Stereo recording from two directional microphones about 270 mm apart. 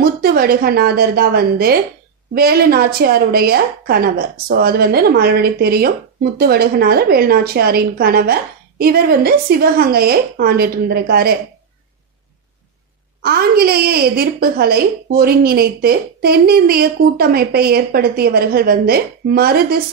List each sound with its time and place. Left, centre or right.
0.0 s a woman's voice: right
13.2 s a woman's voice: right